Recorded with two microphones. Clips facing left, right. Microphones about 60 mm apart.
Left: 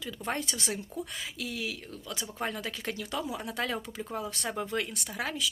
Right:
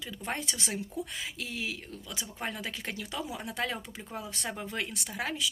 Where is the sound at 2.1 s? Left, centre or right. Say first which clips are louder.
Left 3 dB; centre.